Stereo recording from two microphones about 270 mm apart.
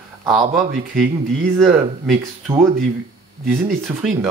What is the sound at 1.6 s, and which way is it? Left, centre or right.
Speech, centre.